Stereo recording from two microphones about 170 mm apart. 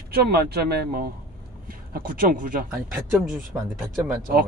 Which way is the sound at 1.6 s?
55° right (ahead or behind).